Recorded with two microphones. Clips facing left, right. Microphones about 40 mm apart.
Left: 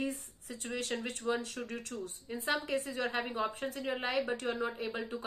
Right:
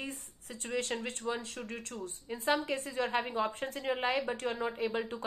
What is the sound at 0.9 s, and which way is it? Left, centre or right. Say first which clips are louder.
Speech: right 1 dB; centre.